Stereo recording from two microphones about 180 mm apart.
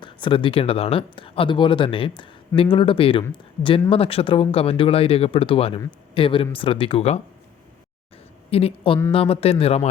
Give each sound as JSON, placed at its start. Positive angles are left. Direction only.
{"t": 0.0, "sound": "speech", "side_deg": 25}
{"t": 8.4, "sound": "speech", "side_deg": 35}